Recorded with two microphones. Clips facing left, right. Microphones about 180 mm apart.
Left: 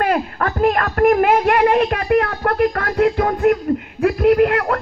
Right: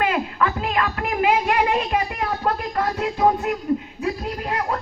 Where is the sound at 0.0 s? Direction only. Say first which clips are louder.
Left 3 dB; 50° left (ahead or behind).